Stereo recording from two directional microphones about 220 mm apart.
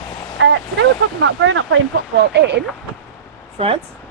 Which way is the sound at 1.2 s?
60° right (ahead or behind).